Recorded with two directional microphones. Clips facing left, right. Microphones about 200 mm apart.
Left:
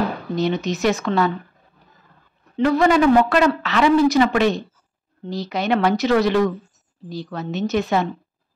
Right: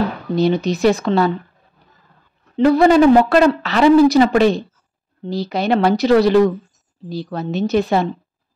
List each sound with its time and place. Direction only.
0.4 s a woman's voice: 35° right (ahead or behind)
2.5 s a woman's voice: 35° right (ahead or behind)